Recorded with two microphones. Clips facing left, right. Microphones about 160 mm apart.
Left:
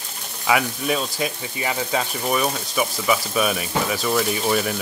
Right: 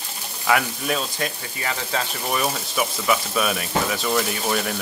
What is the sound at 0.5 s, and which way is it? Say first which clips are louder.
Speech: left 1 dB; 5° left (ahead or behind).